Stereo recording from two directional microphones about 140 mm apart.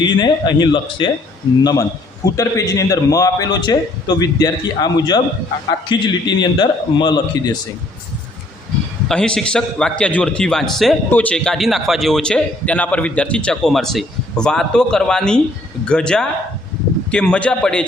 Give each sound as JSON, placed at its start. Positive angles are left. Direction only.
{"t": 0.0, "sound": "a man's voice", "side_deg": 30}
{"t": 2.2, "sound": "a man's voice", "side_deg": 25}
{"t": 9.0, "sound": "a man's voice", "side_deg": 5}